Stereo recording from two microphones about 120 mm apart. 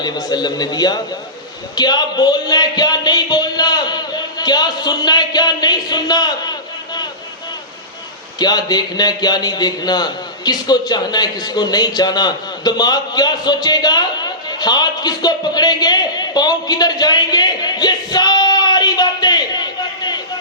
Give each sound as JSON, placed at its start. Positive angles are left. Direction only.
{"t": 0.0, "sound": "a man's voice", "side_deg": 35}
{"t": 8.4, "sound": "a man's voice", "side_deg": 35}